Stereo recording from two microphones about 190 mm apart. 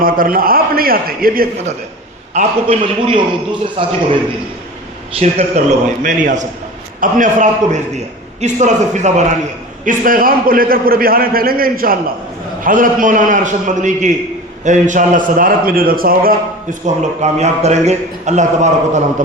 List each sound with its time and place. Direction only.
0.0 s a man's voice: 50° right (ahead or behind)
2.3 s a man's voice: 35° right (ahead or behind)
5.2 s a man's voice: 35° right (ahead or behind)
16.8 s a man's voice: 35° right (ahead or behind)